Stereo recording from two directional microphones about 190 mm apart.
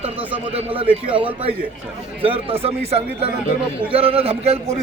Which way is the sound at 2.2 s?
30° right (ahead or behind).